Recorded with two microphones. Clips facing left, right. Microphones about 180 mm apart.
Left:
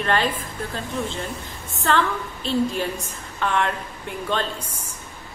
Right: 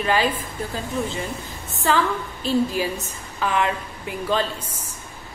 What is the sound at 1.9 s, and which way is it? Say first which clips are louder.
A woman's voice: right 1 dB; 5° right (ahead or behind).